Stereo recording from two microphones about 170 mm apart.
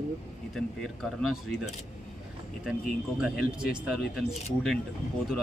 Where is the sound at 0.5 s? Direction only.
Centre (ahead or behind).